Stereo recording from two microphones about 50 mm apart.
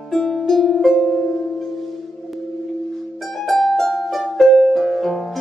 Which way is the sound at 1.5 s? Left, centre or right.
Centre.